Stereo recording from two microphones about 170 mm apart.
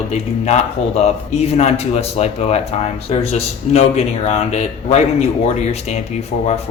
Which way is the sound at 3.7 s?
40° left (ahead or behind).